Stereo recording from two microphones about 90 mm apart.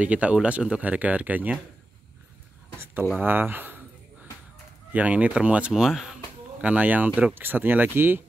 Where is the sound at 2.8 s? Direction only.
25° right (ahead or behind).